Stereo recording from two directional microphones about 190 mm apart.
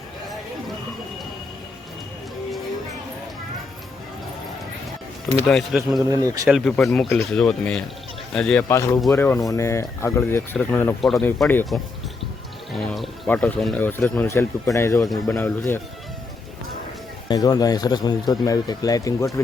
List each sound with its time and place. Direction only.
5.5 s speech: centre (ahead or behind)
6.1 s speech: 20° right (ahead or behind)
6.5 s speech: centre (ahead or behind)
12.7 s speech: centre (ahead or behind); by 15.2 s 15° left (ahead or behind)
15.3 s speech: 5° left (ahead or behind)
17.2 s speech: 20° left (ahead or behind)